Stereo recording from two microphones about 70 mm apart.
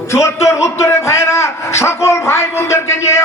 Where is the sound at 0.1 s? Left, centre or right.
Left.